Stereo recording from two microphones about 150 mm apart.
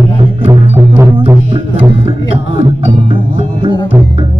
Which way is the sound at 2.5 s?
35° right (ahead or behind).